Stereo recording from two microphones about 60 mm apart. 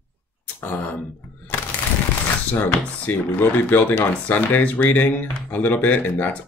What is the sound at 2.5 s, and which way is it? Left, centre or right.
Speech, left.